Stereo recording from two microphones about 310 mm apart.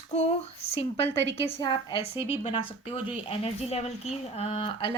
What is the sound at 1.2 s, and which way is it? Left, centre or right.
Speech, right.